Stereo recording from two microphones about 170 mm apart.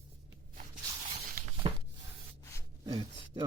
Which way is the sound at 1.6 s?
30° right (ahead or behind).